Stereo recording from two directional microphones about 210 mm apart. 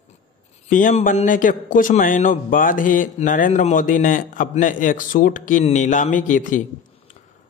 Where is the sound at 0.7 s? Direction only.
40° left (ahead or behind).